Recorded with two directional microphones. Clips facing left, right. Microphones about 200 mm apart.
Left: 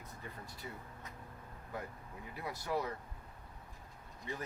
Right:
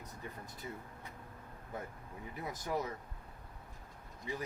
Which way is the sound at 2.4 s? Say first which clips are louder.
Even; 20° right (ahead or behind).